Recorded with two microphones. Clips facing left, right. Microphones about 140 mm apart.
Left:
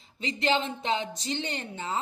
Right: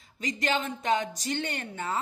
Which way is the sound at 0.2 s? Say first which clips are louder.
Left 2 dB; 25° left (ahead or behind).